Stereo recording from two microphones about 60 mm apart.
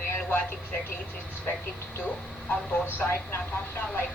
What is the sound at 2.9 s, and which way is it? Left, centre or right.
Speech, left.